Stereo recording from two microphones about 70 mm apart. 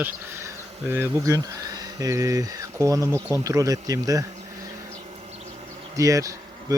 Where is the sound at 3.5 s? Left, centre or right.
Right.